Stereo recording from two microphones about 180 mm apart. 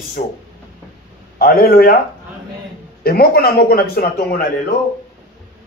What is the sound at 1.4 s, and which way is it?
Speech, 55° left (ahead or behind).